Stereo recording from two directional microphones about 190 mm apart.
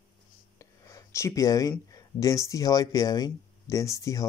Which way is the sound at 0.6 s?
15° left (ahead or behind).